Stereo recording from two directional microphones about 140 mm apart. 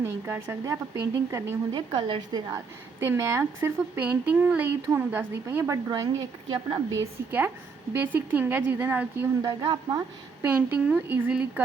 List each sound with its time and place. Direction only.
0.0 s speech: 15° right (ahead or behind)
1.7 s a woman's voice: 35° right (ahead or behind)
3.0 s a woman's voice: 20° right (ahead or behind); by 6.8 s 35° right (ahead or behind)
7.0 s speech: 15° right (ahead or behind)
9.4 s speech: 30° right (ahead or behind)
10.4 s speech: 10° right (ahead or behind)